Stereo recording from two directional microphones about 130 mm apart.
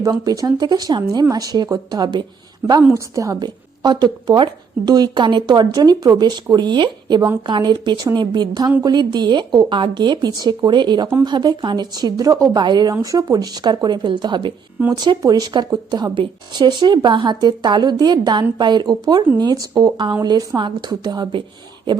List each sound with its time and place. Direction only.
0.0 s a woman's voice: 25° right (ahead or behind)